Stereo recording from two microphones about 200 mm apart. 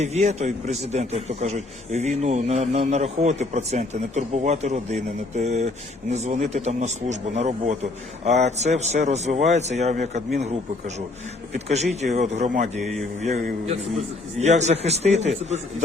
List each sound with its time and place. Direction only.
0.0 s a man's voice: 35° right (ahead or behind)
12.8 s mantra: centre (ahead or behind)
13.3 s a man's voice: 35° right (ahead or behind)